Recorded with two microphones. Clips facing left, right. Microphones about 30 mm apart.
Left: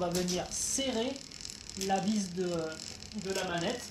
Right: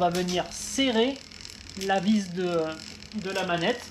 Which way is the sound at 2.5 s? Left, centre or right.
Right.